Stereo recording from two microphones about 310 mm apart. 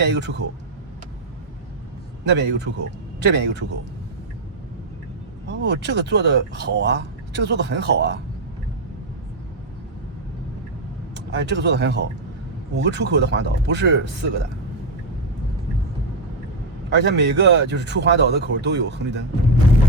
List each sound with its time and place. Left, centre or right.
0.0 s speech: right
2.3 s speech: right
5.5 s speech: right
11.1 s speech: right
16.9 s speech: right